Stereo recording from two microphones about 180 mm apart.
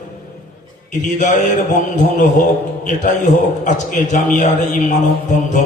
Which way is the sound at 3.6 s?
45° left (ahead or behind).